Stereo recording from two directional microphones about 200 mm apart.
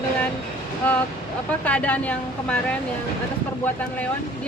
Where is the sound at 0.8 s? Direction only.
5° left (ahead or behind).